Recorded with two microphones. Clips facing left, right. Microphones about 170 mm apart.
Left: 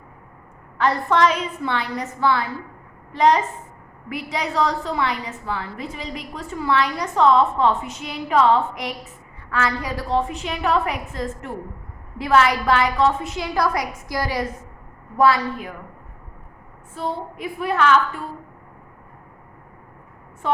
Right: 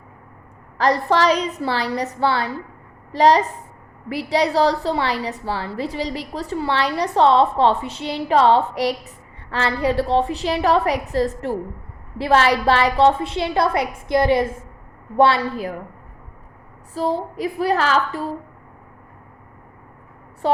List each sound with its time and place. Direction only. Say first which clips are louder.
0.8 s a woman's voice: right 1 dB; 35° right (ahead or behind)
16.9 s a woman's voice: right 5 dB; 35° right (ahead or behind)
20.4 s a woman's voice: right 3 dB; 35° right (ahead or behind)